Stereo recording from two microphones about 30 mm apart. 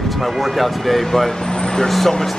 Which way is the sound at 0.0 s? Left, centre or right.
Centre.